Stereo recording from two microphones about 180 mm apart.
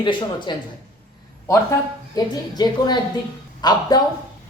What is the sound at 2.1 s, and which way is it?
Speech, 20° left (ahead or behind).